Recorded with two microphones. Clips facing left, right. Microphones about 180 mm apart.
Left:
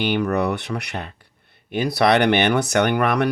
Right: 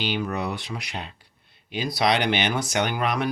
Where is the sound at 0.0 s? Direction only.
60° left (ahead or behind).